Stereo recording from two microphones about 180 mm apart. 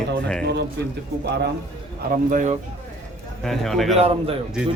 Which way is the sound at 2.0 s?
45° right (ahead or behind).